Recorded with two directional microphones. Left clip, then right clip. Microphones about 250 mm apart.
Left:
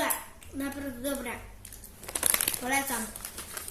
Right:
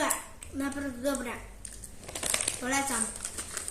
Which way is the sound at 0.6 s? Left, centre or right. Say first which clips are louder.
Right 3 dB; centre.